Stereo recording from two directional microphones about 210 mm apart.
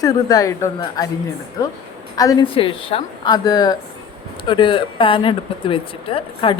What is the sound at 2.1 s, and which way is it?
Speech, 20° left (ahead or behind).